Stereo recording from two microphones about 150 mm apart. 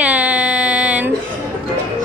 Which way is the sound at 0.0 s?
10° right (ahead or behind).